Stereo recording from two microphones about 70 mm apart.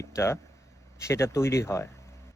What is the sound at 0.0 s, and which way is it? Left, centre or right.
Speech, left.